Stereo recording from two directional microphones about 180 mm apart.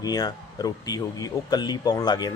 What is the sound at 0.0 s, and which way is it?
Speech, 20° left (ahead or behind).